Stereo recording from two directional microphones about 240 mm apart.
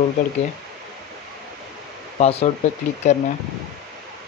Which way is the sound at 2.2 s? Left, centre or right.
Left.